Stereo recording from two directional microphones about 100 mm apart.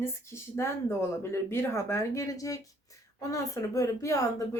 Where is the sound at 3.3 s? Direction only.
35° left (ahead or behind).